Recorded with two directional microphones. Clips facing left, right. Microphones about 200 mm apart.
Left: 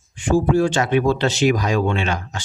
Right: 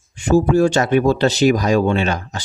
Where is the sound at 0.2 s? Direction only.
40° right (ahead or behind).